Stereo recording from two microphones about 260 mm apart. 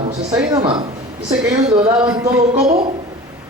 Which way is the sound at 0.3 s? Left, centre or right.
Centre.